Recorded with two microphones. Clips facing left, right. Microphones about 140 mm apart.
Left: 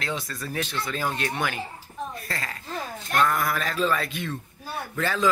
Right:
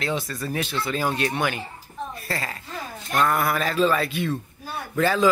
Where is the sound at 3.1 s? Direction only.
20° right (ahead or behind).